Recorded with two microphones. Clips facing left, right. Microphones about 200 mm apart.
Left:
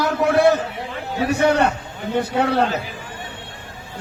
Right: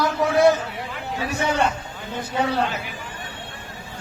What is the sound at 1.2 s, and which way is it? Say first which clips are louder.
A man's voice: left 6 dB; 65° left (ahead or behind).